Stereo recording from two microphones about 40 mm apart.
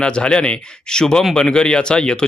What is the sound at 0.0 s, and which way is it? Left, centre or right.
Speech, left.